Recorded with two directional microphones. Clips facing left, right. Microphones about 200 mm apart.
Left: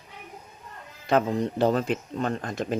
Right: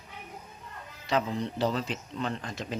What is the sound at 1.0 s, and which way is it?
Speech, 50° left (ahead or behind).